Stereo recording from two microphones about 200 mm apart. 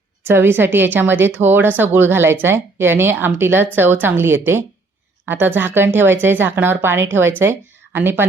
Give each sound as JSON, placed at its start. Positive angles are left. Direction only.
{"t": 0.3, "sound": "speech", "side_deg": -10}